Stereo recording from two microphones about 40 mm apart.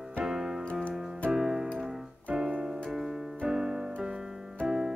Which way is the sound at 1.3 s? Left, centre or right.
Centre.